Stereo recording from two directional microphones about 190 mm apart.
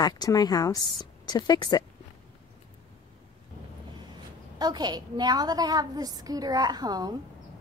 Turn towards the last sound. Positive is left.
turn(degrees=-20)  # may be behind; listen again after turning